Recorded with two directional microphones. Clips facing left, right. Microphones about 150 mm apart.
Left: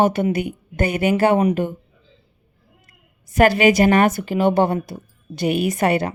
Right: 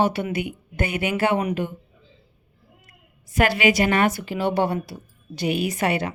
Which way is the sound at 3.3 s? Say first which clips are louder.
Left 5 dB; 45° left (ahead or behind).